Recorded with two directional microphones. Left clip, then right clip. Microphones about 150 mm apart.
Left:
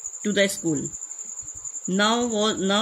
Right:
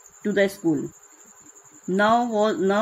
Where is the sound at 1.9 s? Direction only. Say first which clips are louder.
Right 3 dB; 70° left (ahead or behind).